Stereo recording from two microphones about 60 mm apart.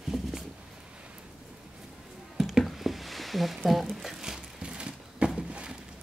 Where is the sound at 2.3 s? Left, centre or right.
Centre.